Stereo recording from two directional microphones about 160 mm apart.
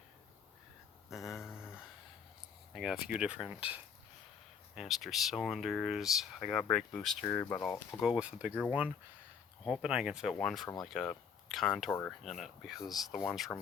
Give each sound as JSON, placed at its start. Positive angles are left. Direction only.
{"t": 1.1, "sound": "a sound", "side_deg": 0}
{"t": 2.7, "sound": "speech", "side_deg": -5}
{"t": 7.3, "sound": "speech", "side_deg": 15}
{"t": 8.0, "sound": "speech", "side_deg": -5}
{"t": 9.6, "sound": "speech", "side_deg": -5}
{"t": 11.9, "sound": "speech", "side_deg": 15}
{"t": 12.2, "sound": "speech", "side_deg": 0}